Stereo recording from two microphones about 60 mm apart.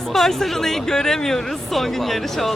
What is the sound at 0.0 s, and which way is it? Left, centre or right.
Speech, centre.